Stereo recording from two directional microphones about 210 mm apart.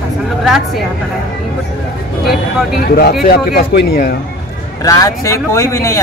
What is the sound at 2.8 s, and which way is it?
Speech, 45° left (ahead or behind).